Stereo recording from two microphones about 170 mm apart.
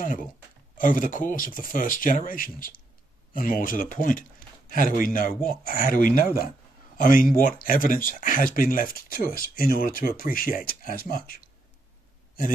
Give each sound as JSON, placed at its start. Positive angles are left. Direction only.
{"t": 0.0, "sound": "speech", "side_deg": 55}